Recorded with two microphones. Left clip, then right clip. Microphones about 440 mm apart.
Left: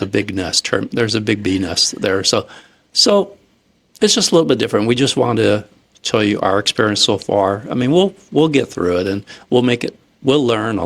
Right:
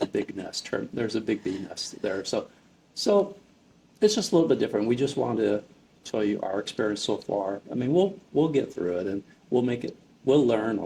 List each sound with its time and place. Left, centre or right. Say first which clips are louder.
0.1 s speech: left 13 dB; left